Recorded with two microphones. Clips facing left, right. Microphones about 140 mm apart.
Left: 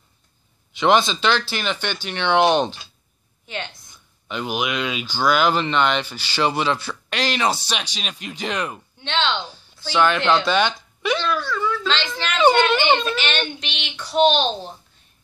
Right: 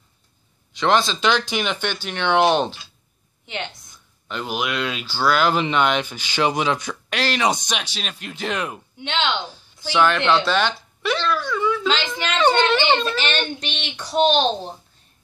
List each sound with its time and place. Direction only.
0.7 s speech: 5° left (ahead or behind)
1.2 s speech: 15° right (ahead or behind)
3.4 s a woman's voice: 20° right (ahead or behind)
4.3 s speech: 5° left (ahead or behind)
8.0 s speech: 5° left (ahead or behind)
9.1 s speech: 15° right (ahead or behind)
9.9 s speech: 5° left (ahead or behind)
11.4 s a sound: 15° right (ahead or behind)
12.4 s a child's voice: 5° left (ahead or behind)
13.2 s a child's voice: 40° right (ahead or behind)